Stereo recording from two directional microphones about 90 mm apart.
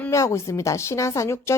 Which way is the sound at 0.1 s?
35° left (ahead or behind).